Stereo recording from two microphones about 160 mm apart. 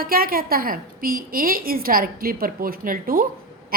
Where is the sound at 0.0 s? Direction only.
65° right (ahead or behind).